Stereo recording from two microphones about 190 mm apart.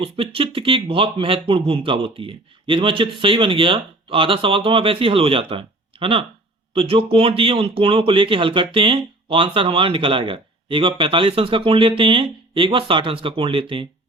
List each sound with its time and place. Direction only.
0.0 s speech: 30° right (ahead or behind)